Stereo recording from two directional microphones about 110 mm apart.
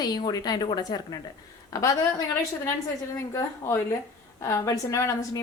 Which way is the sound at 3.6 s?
25° left (ahead or behind).